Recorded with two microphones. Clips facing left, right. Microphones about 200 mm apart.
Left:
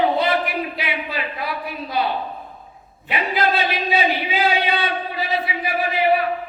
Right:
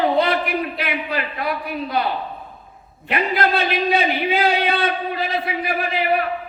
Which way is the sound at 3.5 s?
5° left (ahead or behind).